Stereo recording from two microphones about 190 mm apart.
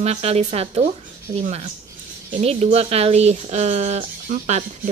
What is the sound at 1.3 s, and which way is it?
Speech, 20° right (ahead or behind).